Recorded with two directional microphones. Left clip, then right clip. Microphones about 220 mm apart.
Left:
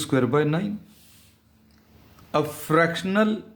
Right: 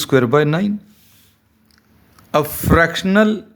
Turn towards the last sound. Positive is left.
turn(degrees=-40)  # may be behind; listen again after turning